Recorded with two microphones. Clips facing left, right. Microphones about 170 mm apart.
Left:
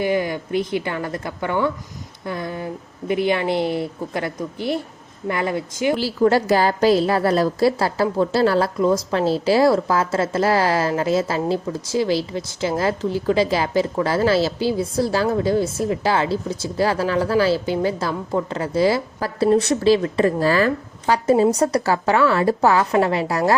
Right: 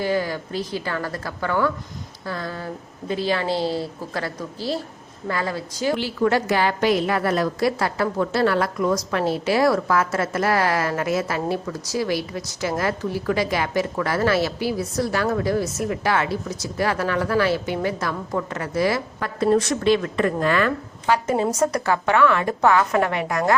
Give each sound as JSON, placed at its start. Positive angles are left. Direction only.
{"t": 0.0, "sound": "a woman's voice", "side_deg": 15}
{"t": 6.0, "sound": "a woman's voice", "side_deg": 35}